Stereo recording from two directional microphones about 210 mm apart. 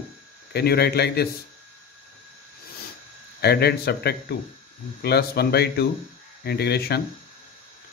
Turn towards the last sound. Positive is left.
turn(degrees=50)  # may be behind; listen again after turning